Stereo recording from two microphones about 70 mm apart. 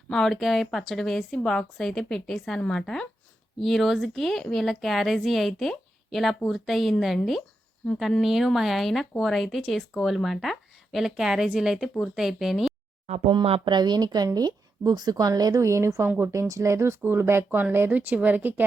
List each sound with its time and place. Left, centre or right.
0.1 s a woman's voice: centre
7.8 s speech: centre
8.2 s a woman's voice: centre
13.3 s speech: right
15.6 s a woman's voice: right
16.0 s speech: right
16.3 s speech: right